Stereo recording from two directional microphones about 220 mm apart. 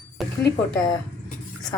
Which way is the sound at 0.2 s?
Centre (ahead or behind).